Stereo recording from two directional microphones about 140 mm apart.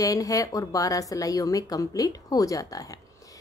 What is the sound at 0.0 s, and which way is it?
A woman's voice, 25° left (ahead or behind).